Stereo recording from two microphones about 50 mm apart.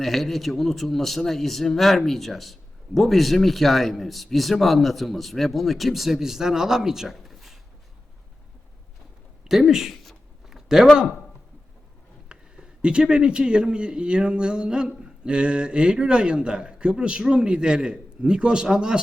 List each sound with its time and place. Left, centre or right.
0.0 s a man's voice: centre
9.5 s speech: centre
10.0 s a sound: centre
12.3 s speech: centre